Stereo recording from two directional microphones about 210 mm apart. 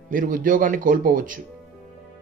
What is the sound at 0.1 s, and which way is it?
Speech, 40° right (ahead or behind).